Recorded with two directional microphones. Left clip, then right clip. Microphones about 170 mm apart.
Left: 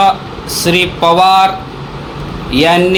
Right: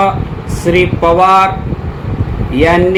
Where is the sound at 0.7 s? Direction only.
45° left (ahead or behind).